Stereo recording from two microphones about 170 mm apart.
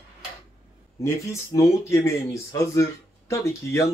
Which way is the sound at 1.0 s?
15° left (ahead or behind).